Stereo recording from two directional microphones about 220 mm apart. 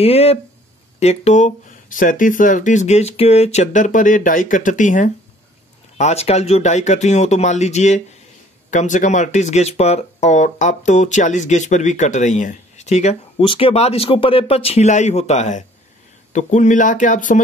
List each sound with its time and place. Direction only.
0.0 s speech: 25° left (ahead or behind)